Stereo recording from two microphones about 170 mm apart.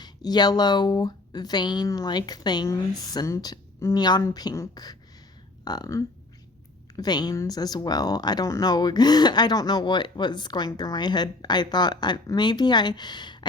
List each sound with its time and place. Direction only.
0.0 s speech: 25° left (ahead or behind)